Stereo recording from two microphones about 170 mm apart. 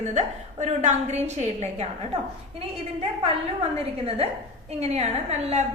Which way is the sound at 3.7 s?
35° right (ahead or behind).